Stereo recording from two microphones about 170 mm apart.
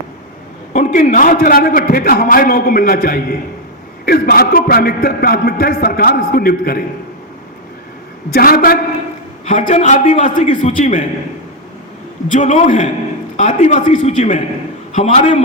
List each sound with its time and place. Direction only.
0.9 s a man's voice: 55° left (ahead or behind)
8.3 s a man's voice: 60° left (ahead or behind)
9.5 s a man's voice: 45° left (ahead or behind)
12.3 s a man's voice: 50° left (ahead or behind)